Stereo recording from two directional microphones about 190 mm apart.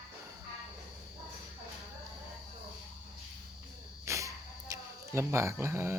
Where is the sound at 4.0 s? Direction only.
15° right (ahead or behind).